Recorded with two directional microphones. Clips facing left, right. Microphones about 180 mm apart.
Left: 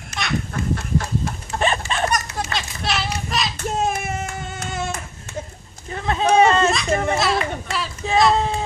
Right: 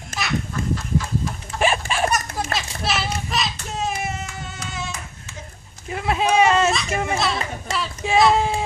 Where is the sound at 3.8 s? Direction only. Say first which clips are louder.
Left 2 dB; 50° left (ahead or behind).